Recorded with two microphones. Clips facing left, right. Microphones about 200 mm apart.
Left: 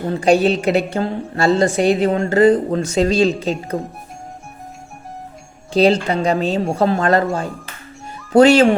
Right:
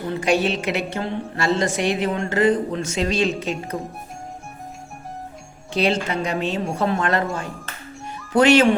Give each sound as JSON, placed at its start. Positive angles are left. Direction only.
{"t": 0.1, "sound": "a woman's voice", "side_deg": 35}
{"t": 5.7, "sound": "a woman's voice", "side_deg": 35}
{"t": 8.3, "sound": "a woman's voice", "side_deg": 35}